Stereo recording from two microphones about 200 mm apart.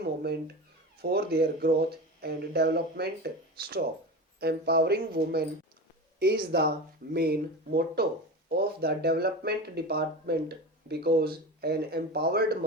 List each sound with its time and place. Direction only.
0.0 s cat: 55° right (ahead or behind)
1.1 s speech: 50° right (ahead or behind)